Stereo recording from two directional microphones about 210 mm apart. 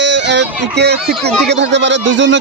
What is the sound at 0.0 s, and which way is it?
Speech, 55° right (ahead or behind).